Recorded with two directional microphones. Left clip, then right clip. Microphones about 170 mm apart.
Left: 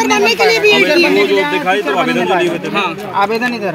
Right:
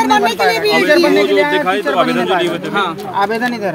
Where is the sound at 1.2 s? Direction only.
55° right (ahead or behind).